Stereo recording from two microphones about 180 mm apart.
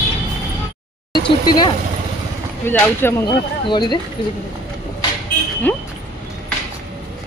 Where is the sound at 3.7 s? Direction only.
25° left (ahead or behind).